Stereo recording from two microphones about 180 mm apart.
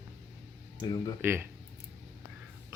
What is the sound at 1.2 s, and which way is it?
Speech, 10° right (ahead or behind).